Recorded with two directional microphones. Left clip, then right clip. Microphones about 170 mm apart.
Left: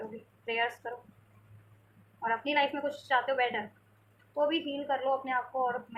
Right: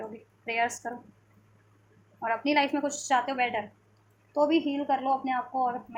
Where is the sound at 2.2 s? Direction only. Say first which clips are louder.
Right 3 dB; 50° right (ahead or behind).